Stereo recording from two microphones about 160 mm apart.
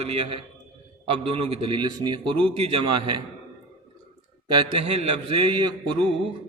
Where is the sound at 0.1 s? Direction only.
35° right (ahead or behind).